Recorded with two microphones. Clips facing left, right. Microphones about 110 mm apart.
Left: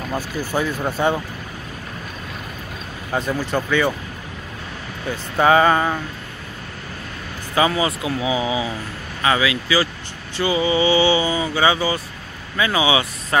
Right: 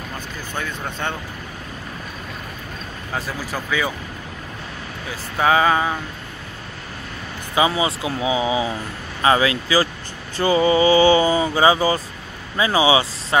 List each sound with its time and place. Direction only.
0.4 s speech: 10° left (ahead or behind)
3.1 s speech: centre (ahead or behind)
5.1 s speech: centre (ahead or behind)
7.5 s speech: 20° right (ahead or behind)